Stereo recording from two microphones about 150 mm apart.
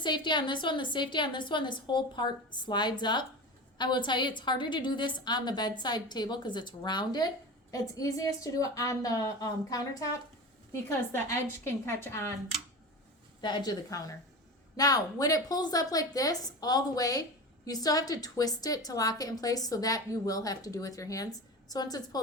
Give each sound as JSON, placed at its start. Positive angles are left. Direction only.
{"t": 0.0, "sound": "a woman's voice", "side_deg": 30}
{"t": 13.4, "sound": "a woman's voice", "side_deg": 30}